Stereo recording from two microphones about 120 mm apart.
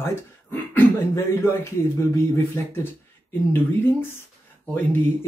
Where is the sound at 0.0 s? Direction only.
20° left (ahead or behind).